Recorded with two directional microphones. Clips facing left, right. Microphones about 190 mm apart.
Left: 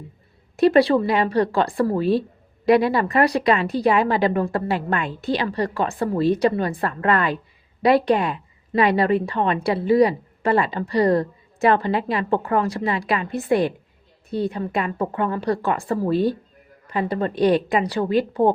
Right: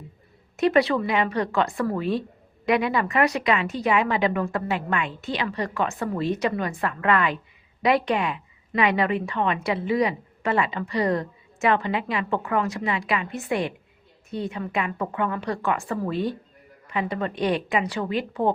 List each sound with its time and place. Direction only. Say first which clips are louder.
0.5 s a woman's voice: left 5 dB; 35° left (ahead or behind)